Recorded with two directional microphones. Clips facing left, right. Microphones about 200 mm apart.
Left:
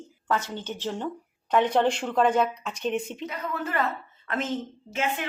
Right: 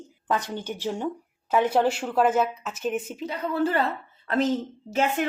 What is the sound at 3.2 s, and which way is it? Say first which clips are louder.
A woman's voice: right 6 dB; 30° right (ahead or behind).